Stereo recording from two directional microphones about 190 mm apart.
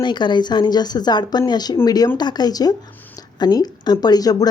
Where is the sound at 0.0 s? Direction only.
25° left (ahead or behind).